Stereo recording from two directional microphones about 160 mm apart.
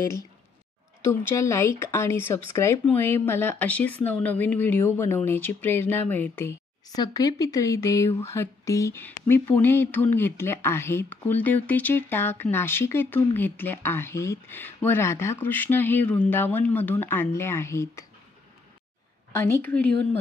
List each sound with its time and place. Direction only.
1.0 s speech: 20° left (ahead or behind)
19.3 s speech: 15° left (ahead or behind)